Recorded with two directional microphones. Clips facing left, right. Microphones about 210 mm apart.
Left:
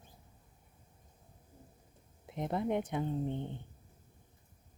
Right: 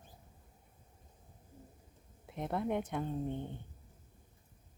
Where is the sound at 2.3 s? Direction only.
15° left (ahead or behind).